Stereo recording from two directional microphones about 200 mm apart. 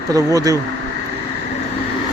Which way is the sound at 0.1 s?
15° right (ahead or behind).